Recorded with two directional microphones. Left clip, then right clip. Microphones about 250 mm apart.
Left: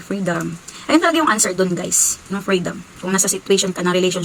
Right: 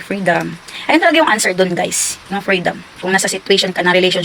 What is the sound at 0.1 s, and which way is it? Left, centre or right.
Speech, centre.